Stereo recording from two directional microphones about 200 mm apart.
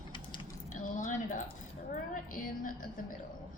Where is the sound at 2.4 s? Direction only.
40° left (ahead or behind).